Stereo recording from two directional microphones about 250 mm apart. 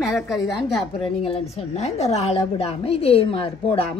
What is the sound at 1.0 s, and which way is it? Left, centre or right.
A woman's voice, left.